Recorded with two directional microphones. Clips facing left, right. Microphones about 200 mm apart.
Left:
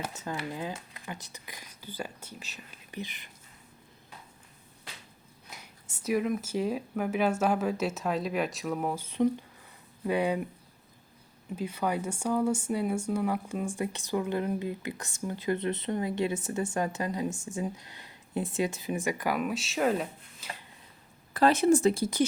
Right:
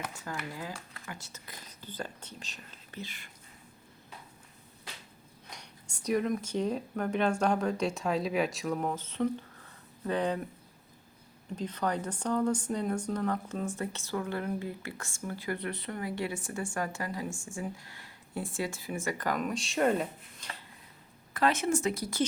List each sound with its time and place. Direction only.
0.0 s speech: 20° left (ahead or behind)
5.5 s speech: 5° left (ahead or behind)
11.5 s speech: 10° left (ahead or behind)
21.3 s speech: 35° left (ahead or behind)